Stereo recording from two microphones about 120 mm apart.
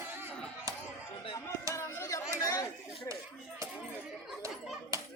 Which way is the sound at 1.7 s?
25° left (ahead or behind).